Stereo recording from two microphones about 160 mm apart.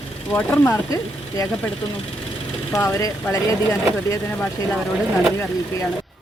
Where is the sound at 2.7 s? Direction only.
20° left (ahead or behind).